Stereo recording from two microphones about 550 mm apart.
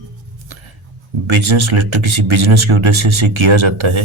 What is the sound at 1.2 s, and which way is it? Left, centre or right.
Speech, right.